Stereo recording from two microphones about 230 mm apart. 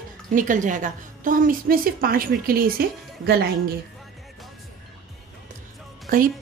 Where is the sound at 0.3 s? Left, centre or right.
Right.